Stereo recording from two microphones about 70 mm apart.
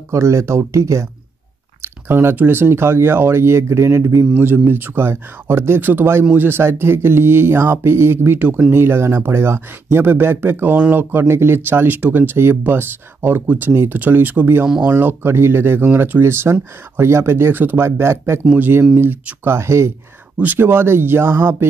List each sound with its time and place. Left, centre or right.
0.1 s speech: right
4.3 s speech: right